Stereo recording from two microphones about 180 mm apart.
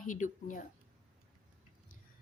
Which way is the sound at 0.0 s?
45° left (ahead or behind).